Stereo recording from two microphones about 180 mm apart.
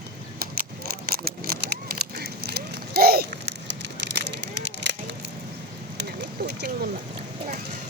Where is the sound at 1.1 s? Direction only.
55° right (ahead or behind).